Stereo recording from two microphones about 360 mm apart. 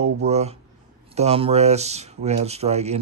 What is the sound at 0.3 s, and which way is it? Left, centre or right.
Speech, centre.